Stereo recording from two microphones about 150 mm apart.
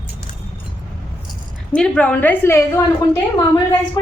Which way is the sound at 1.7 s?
10° left (ahead or behind).